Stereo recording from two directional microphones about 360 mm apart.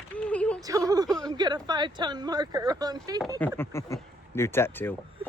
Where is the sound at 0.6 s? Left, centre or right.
Centre.